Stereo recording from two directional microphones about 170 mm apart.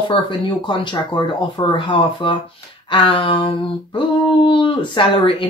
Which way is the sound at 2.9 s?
30° left (ahead or behind).